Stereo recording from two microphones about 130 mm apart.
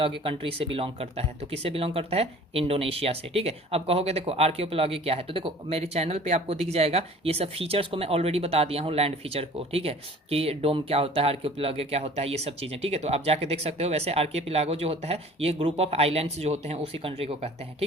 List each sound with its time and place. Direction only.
0.0 s speech: 45° right (ahead or behind)